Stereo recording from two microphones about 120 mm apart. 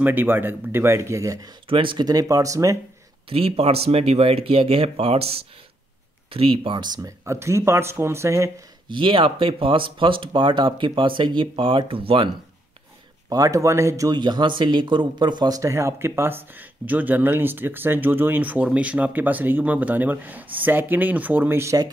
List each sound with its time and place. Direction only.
0.0 s speech: 15° right (ahead or behind)
1.7 s speech: 45° right (ahead or behind); by 2.8 s 25° right (ahead or behind)
3.3 s speech: 55° right (ahead or behind); by 8.5 s 25° right (ahead or behind)
8.8 s speech: 45° right (ahead or behind)
13.3 s speech: 30° right (ahead or behind)